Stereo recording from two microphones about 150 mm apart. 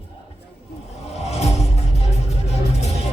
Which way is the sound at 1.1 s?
45° left (ahead or behind).